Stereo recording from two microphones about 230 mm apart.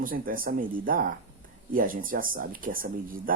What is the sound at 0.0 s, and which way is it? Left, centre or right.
Speech, right.